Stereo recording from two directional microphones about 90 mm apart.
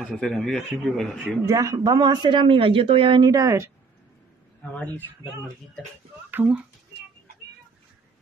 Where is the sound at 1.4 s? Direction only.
35° right (ahead or behind); by 3.2 s 85° right.